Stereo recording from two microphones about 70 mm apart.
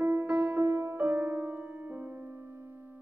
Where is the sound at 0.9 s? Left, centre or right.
Right.